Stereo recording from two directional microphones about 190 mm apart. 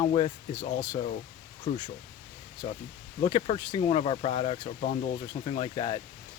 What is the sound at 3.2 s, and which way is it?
Speech, 30° left (ahead or behind).